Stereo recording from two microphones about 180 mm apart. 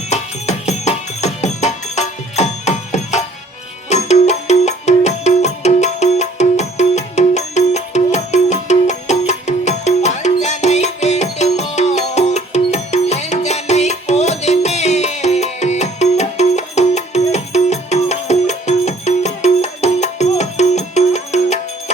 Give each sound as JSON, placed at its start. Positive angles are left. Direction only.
{"t": 0.1, "sound": "music", "side_deg": 40}